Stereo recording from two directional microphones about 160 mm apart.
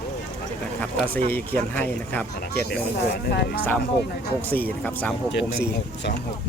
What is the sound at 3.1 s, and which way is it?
Speech, 85° left.